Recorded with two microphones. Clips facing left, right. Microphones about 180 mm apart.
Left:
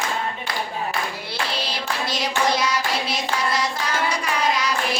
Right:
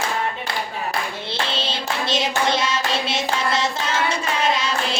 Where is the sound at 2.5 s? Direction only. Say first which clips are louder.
Even; 25° right (ahead or behind).